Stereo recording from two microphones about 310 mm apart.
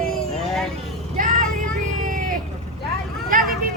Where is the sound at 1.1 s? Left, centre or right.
Right.